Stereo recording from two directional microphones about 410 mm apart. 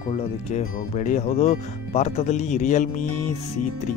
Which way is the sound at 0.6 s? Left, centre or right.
Centre.